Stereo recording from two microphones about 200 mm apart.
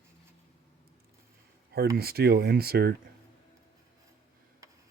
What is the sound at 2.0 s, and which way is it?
Speech, 50° right (ahead or behind).